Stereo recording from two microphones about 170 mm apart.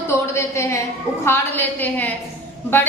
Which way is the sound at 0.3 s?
15° left (ahead or behind).